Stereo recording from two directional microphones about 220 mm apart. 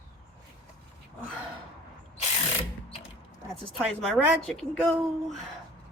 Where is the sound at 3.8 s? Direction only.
Centre (ahead or behind).